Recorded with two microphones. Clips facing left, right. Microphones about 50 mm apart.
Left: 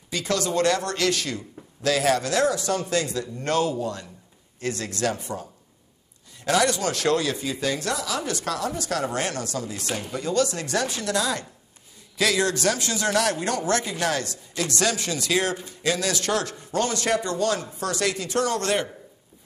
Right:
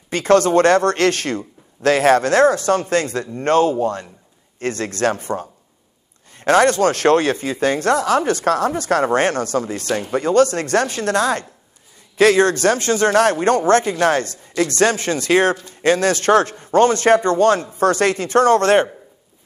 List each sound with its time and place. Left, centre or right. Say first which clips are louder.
0.1 s speech: right 12 dB; right